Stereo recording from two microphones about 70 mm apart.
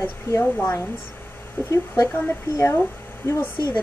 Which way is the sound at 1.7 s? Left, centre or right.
Left.